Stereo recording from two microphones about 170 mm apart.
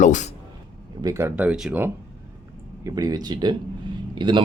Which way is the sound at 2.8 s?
20° right (ahead or behind).